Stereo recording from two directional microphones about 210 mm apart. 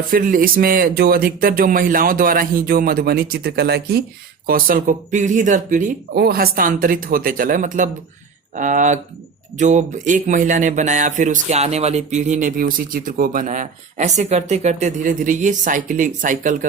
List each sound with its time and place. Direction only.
0.1 s speech: 40° right (ahead or behind)